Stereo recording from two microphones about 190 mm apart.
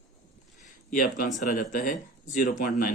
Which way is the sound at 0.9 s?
45° left (ahead or behind).